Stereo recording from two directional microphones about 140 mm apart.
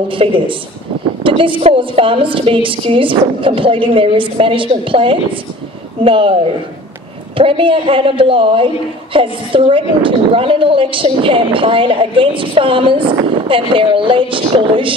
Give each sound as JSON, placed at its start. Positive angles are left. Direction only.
{"t": 0.1, "sound": "a woman's voice", "side_deg": -40}